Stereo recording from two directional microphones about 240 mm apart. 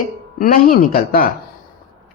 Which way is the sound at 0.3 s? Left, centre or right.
Left.